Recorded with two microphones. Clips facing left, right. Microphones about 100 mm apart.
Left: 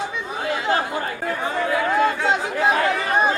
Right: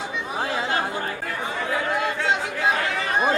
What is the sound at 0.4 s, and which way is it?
Chatter, 30° right (ahead or behind).